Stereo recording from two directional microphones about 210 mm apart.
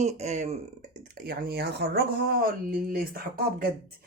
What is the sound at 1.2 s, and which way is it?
Speech, 50° right (ahead or behind).